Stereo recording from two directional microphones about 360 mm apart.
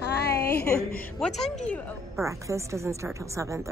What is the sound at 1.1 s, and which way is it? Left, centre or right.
A woman's voice, centre.